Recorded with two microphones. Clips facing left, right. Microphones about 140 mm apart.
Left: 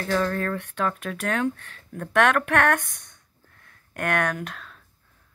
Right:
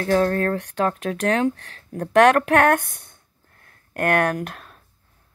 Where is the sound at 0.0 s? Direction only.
55° right (ahead or behind); by 2.0 s 70° right (ahead or behind).